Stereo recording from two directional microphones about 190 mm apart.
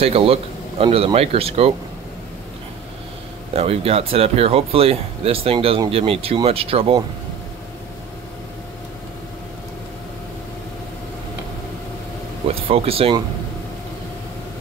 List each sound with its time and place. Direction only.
0.0 s speech: 30° right (ahead or behind)
3.5 s speech: 30° right (ahead or behind)
12.4 s speech: 30° right (ahead or behind)